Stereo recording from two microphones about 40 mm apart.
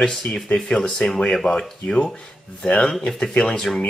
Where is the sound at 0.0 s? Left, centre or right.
Left.